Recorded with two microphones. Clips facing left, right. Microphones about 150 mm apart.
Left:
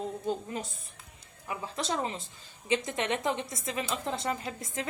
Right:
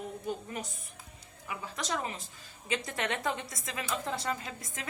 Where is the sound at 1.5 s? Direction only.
30° left (ahead or behind).